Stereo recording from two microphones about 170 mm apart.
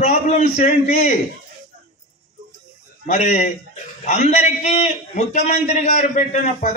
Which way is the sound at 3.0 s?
40° left (ahead or behind).